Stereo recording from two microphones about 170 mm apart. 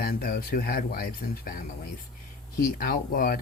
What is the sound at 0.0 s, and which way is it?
Speech, 55° left (ahead or behind).